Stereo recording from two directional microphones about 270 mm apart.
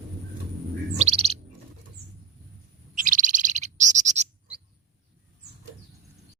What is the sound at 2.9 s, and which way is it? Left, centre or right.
Bird, right.